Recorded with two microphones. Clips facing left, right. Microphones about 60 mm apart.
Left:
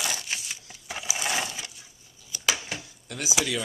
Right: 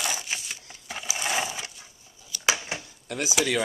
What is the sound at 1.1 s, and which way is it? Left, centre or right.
Mechanisms, centre.